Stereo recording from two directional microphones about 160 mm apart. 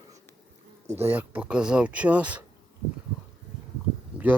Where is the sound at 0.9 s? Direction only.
10° right (ahead or behind).